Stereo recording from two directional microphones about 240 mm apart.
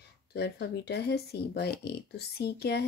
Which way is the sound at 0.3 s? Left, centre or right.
Left.